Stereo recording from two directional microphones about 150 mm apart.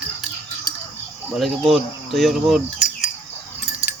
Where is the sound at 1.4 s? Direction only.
Centre (ahead or behind).